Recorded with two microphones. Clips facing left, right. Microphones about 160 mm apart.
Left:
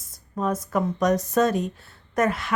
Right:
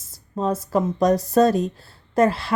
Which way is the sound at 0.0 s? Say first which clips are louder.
Right 2 dB; 25° right (ahead or behind).